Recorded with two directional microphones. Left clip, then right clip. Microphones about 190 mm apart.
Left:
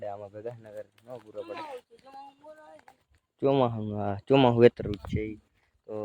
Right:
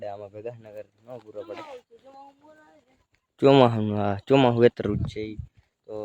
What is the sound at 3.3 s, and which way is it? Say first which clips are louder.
Speech: right 8 dB; 30° right (ahead or behind).